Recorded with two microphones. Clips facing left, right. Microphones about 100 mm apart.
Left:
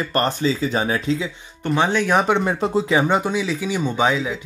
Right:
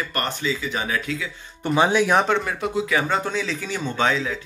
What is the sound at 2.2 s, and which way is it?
Speech, 20° left (ahead or behind).